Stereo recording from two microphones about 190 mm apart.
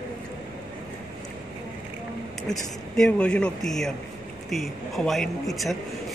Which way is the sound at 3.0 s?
5° left (ahead or behind).